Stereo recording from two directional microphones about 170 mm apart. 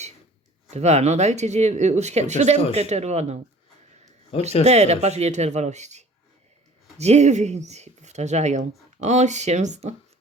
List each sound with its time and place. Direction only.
0.7 s speech: 40° right (ahead or behind)
4.6 s speech: 40° right (ahead or behind)